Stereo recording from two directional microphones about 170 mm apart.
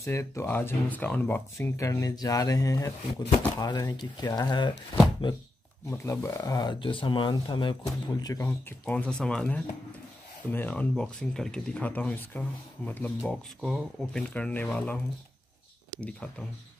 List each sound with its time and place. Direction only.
0.0 s speech: 15° left (ahead or behind)
5.9 s speech: 15° left (ahead or behind)
16.0 s speech: 5° left (ahead or behind)